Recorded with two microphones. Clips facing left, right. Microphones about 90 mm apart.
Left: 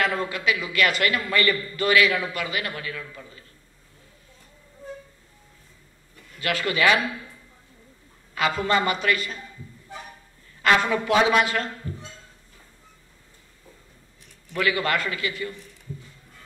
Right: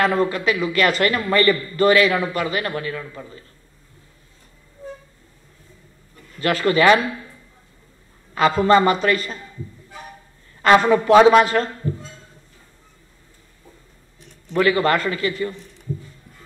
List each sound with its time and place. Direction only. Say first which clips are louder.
0.0 s a man's voice: right 6 dB; 40° right (ahead or behind)
6.4 s a man's voice: right 6 dB; 40° right (ahead or behind)
8.4 s a man's voice: right 8 dB; 40° right (ahead or behind)
10.6 s a man's voice: right 7 dB; 40° right (ahead or behind)
14.5 s a man's voice: right 7 dB; 35° right (ahead or behind)